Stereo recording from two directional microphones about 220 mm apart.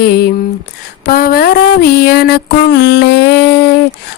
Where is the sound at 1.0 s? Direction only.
45° left (ahead or behind).